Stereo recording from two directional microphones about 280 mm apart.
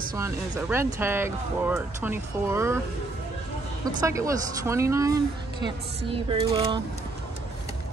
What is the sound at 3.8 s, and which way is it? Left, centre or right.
Speech, centre.